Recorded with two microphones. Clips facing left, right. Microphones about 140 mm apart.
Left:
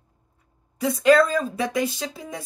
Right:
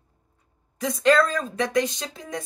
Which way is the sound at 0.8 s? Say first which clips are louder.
Left 3 dB; 5° left (ahead or behind).